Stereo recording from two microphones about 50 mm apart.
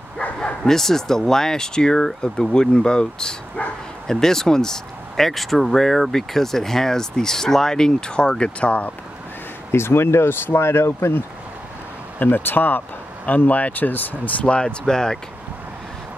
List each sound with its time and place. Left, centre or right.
0.7 s speech: centre; by 8.9 s left
9.7 s speech: left
12.2 s speech: left; by 15.1 s centre